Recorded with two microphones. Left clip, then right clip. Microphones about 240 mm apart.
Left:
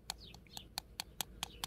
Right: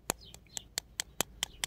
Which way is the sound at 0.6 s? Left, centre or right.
Right.